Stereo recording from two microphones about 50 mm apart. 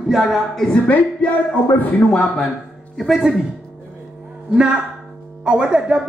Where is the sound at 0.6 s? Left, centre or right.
Centre.